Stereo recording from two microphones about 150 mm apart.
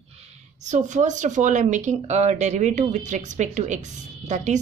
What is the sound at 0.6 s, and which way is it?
Speech, 55° right (ahead or behind).